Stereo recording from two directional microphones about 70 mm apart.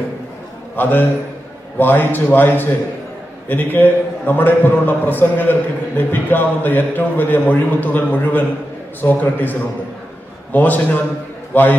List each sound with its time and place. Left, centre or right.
0.7 s a man's voice: left